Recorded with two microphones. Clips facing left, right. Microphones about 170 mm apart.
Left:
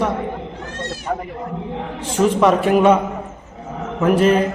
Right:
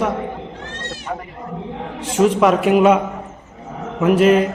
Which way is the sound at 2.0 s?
Centre (ahead or behind).